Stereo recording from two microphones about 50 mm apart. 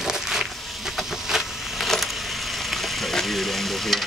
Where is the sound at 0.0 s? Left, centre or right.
Centre.